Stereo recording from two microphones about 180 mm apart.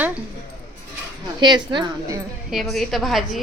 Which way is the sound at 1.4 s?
25° right (ahead or behind).